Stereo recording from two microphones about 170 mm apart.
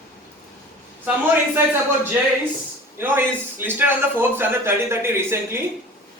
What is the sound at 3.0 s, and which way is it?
A man's voice, 10° right (ahead or behind).